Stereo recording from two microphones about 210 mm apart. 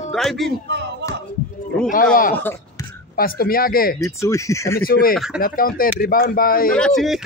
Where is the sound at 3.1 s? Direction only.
45° left (ahead or behind).